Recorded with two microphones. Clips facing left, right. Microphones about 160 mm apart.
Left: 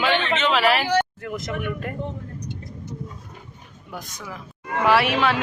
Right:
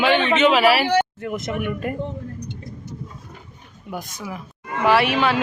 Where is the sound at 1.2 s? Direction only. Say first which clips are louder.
Right 3 dB; 20° right (ahead or behind).